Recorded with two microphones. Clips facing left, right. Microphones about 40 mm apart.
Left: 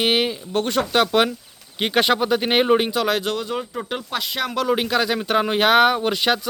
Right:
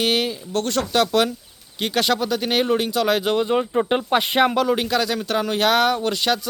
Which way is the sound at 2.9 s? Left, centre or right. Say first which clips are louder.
Right 1 dB; centre.